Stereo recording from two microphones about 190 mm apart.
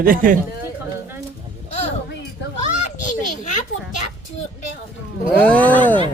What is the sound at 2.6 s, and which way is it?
Children playing, 40° left (ahead or behind).